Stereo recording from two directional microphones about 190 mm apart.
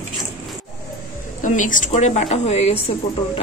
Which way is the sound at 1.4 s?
40° left (ahead or behind).